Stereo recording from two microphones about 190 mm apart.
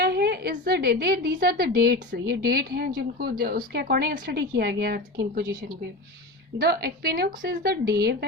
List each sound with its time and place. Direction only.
0.0 s a sound: 60° right (ahead or behind)
0.5 s a woman's voice: 50° right (ahead or behind)
6.6 s a woman's voice: 55° right (ahead or behind)